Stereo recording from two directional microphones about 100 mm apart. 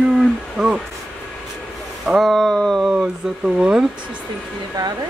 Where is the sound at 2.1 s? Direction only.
Centre (ahead or behind).